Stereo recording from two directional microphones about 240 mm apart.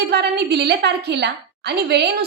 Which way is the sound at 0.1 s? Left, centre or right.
Right.